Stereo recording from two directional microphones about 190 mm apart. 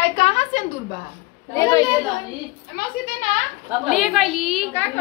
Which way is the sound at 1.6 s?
20° left (ahead or behind).